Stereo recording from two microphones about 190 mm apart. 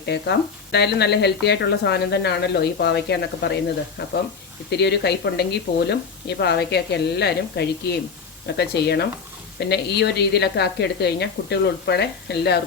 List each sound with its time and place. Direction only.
0.0 s speech: 60° left (ahead or behind)